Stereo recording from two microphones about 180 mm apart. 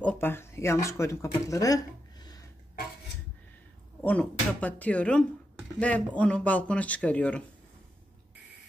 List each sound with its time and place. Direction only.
0.0 s speech: 10° left (ahead or behind)
4.0 s speech: 10° left (ahead or behind)